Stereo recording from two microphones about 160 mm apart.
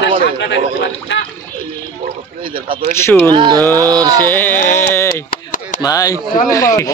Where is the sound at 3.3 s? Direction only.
30° right (ahead or behind).